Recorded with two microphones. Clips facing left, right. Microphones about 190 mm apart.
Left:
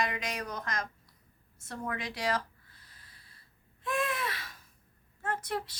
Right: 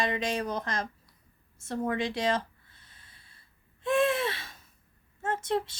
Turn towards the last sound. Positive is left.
turn(degrees=-25)  # may be behind; listen again after turning